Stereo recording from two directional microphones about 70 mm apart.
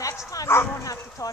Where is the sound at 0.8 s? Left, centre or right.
Left.